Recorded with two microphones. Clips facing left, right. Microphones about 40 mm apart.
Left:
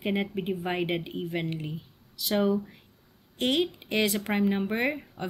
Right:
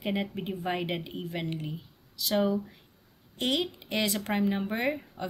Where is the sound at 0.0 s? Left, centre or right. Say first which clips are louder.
Left 3 dB; centre.